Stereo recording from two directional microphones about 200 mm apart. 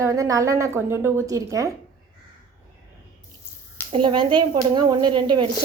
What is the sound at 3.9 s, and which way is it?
Speech, 25° right (ahead or behind).